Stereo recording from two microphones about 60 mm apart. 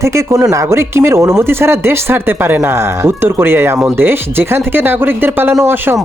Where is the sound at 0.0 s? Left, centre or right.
Right.